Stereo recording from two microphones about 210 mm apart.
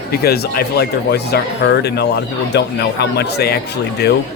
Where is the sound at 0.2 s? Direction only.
50° left (ahead or behind).